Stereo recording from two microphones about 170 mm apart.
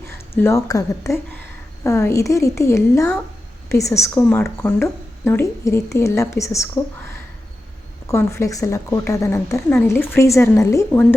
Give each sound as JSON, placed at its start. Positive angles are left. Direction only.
{"t": 0.3, "sound": "a woman's voice", "side_deg": 15}